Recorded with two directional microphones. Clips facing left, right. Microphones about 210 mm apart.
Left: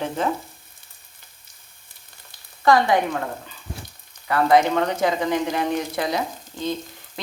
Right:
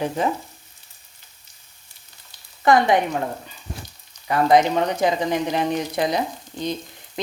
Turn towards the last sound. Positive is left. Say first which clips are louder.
# right 5 dB
turn(degrees=-20)  # may be behind; listen again after turning